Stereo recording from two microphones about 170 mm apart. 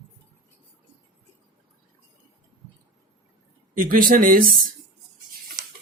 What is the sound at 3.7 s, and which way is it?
Speech, 55° right (ahead or behind).